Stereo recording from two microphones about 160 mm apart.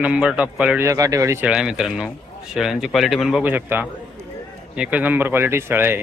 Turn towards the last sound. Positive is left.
turn(degrees=-15)  # may be behind; listen again after turning